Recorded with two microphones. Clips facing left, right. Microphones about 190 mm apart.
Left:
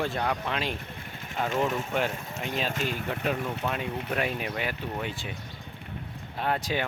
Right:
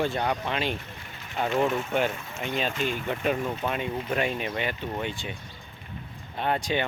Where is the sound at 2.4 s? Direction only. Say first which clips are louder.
Right 2 dB; centre (ahead or behind).